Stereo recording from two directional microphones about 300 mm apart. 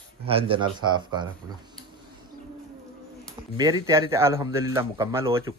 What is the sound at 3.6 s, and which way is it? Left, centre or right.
Speech, centre.